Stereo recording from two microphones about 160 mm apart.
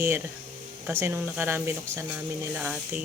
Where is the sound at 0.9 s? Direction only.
15° right (ahead or behind).